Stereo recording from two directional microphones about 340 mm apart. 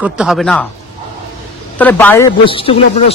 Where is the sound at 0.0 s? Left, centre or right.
Centre.